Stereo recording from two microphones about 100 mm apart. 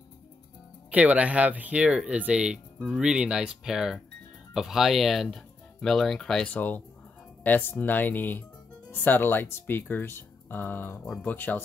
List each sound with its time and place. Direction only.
0.9 s speech: 15° right (ahead or behind); by 11.6 s 20° left (ahead or behind)